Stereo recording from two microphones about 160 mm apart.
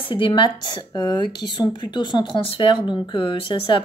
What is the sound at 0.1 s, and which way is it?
A woman's voice, 30° left (ahead or behind).